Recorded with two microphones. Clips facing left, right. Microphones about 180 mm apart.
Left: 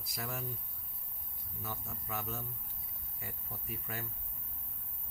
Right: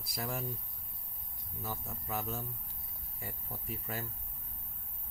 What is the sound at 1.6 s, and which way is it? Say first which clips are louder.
Speech: right 2 dB; 35° right (ahead or behind).